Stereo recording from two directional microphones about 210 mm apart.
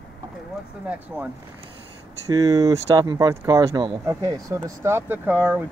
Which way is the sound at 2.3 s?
20° right (ahead or behind).